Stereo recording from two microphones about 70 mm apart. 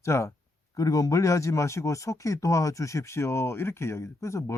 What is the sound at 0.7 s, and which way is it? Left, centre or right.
Speech, left.